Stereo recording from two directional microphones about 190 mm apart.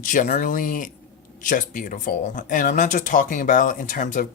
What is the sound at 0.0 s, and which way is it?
Speech, 40° left (ahead or behind).